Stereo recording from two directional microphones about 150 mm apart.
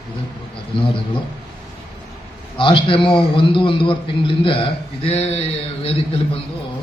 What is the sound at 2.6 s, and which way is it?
A man's voice, 35° left (ahead or behind).